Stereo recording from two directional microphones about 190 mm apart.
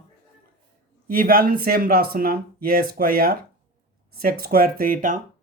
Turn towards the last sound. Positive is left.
turn(degrees=-45)  # may be behind; listen again after turning